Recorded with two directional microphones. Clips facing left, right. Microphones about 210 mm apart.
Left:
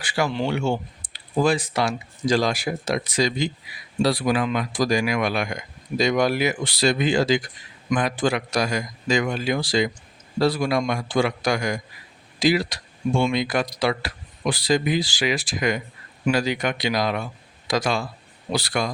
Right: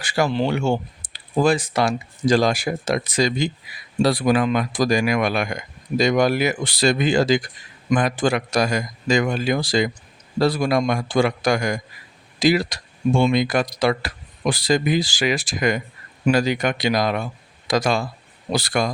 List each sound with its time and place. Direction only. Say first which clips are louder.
0.0 s speech: right 3 dB; 40° right (ahead or behind)
1.0 s computer keyboard: right 1 dB; 70° right (ahead or behind)
1.4 s speech: right 2 dB; 45° right (ahead or behind)